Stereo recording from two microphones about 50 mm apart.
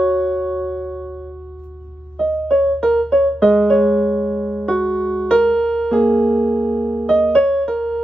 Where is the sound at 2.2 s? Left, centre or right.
Centre.